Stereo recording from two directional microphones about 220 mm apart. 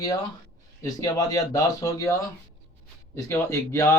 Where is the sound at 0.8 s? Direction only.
15° left (ahead or behind).